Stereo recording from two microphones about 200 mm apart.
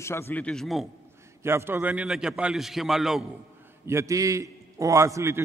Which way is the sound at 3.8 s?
15° right (ahead or behind).